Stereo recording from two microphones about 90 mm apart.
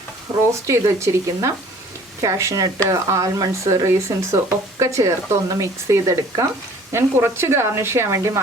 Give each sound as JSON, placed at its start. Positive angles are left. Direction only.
{"t": 0.7, "sound": "speech", "side_deg": -30}